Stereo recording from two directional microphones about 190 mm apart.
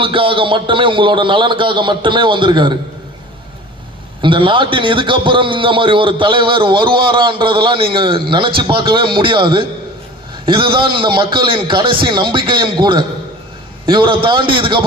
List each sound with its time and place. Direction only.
0.0 s a man's voice: 25° right (ahead or behind)
4.2 s a man's voice: 25° right (ahead or behind)